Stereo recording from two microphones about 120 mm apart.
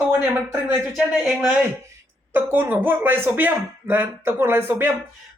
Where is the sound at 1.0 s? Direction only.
10° right (ahead or behind).